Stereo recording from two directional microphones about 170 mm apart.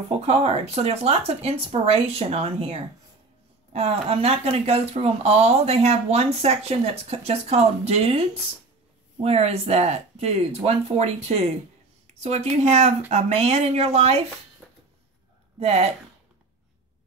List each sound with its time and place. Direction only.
0.2 s speech: 40° right (ahead or behind)
15.6 s speech: 40° right (ahead or behind)